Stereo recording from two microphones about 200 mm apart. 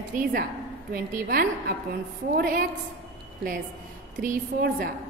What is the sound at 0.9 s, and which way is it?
A woman's voice, 50° right (ahead or behind).